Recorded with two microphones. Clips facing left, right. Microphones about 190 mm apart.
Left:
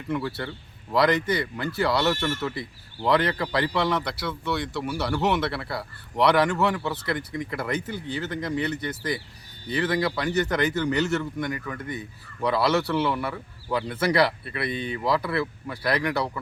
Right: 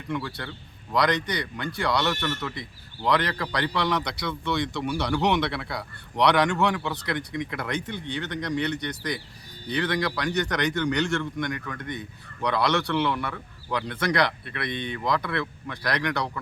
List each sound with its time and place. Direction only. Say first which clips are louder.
0.1 s speech: left 3 dB; 5° left (ahead or behind)